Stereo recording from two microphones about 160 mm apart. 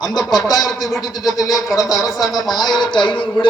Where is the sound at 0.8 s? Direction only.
Centre (ahead or behind).